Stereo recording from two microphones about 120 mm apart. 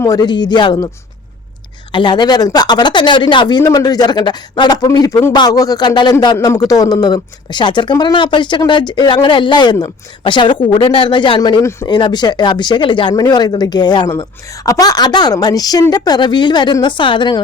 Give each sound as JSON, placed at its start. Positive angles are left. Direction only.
{"t": 0.0, "sound": "speech", "side_deg": 30}
{"t": 1.9, "sound": "speech", "side_deg": 40}